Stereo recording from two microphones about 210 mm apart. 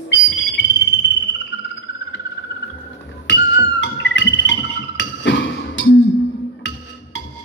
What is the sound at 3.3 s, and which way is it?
Music, 60° left (ahead or behind).